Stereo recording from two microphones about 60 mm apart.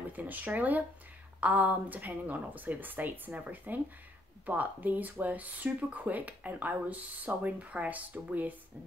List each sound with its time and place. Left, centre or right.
0.1 s speech: right